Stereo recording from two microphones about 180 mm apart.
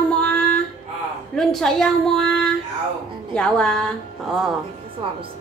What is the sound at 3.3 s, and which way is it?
A woman's voice, 5° left (ahead or behind).